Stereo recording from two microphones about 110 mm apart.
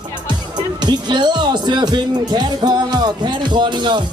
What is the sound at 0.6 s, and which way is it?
Speech, 40° right (ahead or behind).